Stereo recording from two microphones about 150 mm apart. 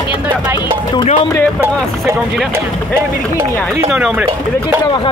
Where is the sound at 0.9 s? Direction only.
40° left (ahead or behind).